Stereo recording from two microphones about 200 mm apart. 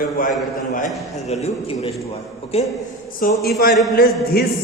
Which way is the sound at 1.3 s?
30° left (ahead or behind).